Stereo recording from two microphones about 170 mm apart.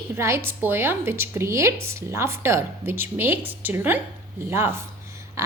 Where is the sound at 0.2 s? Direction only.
15° right (ahead or behind).